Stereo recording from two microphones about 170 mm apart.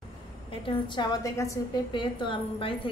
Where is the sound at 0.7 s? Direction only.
25° left (ahead or behind).